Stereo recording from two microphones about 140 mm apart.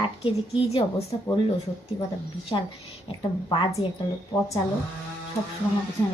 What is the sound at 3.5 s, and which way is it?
Speech, 35° left (ahead or behind).